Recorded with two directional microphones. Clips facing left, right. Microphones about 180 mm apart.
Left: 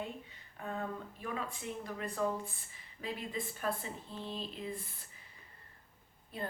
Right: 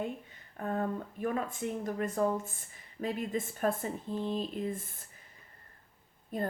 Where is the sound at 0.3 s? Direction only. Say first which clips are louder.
Right 7 dB; 50° right (ahead or behind).